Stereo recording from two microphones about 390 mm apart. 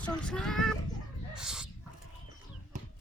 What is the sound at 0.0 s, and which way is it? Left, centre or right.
Speech, centre.